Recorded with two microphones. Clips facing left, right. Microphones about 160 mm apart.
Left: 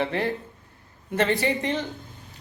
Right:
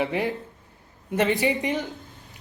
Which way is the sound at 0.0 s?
15° right (ahead or behind).